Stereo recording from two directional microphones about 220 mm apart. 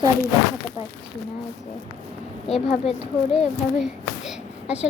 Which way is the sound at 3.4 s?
Centre (ahead or behind).